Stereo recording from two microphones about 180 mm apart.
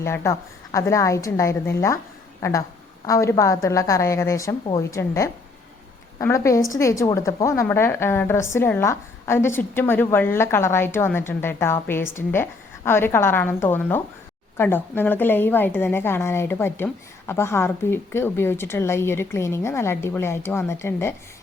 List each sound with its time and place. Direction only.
0.0 s a woman's voice: 15° left (ahead or behind)